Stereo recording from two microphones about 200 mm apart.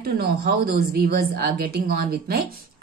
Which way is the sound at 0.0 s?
50° right (ahead or behind).